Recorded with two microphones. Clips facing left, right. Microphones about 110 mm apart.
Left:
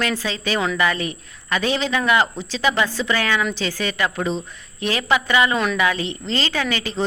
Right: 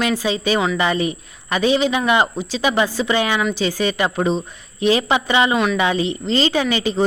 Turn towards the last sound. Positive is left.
turn(degrees=-20)  # may be behind; listen again after turning